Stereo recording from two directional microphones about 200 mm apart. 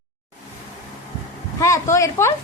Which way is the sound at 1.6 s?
15° left (ahead or behind).